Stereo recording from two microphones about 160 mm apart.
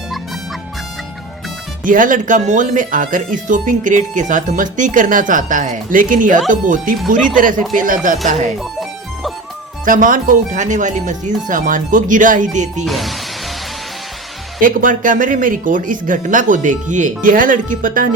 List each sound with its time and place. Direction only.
1.8 s speech: 55° right (ahead or behind)
8.5 s music: centre (ahead or behind)
9.8 s speech: 55° right (ahead or behind)
12.8 s speech: centre (ahead or behind)
14.6 s speech: 55° right (ahead or behind)